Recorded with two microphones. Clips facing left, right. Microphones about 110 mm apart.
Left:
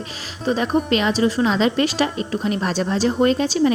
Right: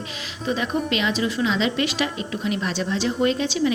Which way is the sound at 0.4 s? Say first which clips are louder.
Left 5 dB; 40° left (ahead or behind).